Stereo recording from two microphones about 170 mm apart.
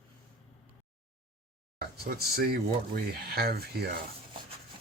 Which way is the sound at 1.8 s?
65° right (ahead or behind).